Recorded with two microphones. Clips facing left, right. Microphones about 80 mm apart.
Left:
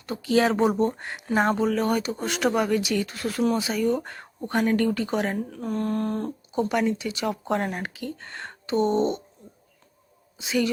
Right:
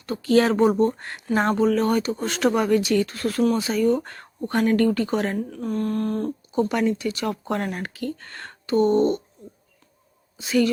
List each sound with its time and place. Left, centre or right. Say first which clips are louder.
0.0 s speech: right 3 dB; centre
10.3 s a woman's voice: right 4 dB; centre